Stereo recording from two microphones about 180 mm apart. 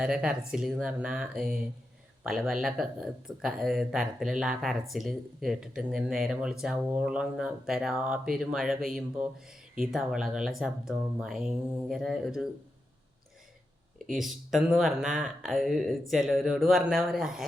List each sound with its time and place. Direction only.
0.0 s speech: 5° right (ahead or behind)
14.1 s speech: centre (ahead or behind)